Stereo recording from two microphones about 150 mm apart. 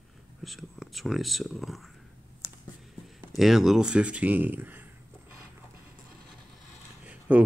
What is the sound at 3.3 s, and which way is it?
Speech, centre (ahead or behind).